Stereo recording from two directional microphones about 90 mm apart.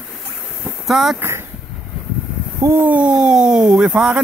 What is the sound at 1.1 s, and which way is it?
Speech, 30° right (ahead or behind).